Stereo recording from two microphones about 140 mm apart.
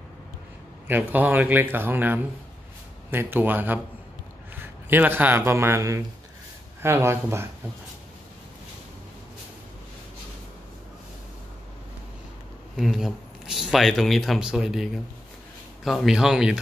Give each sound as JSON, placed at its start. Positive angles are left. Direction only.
{"t": 0.8, "sound": "a man's voice", "side_deg": -10}
{"t": 12.7, "sound": "speech", "side_deg": 0}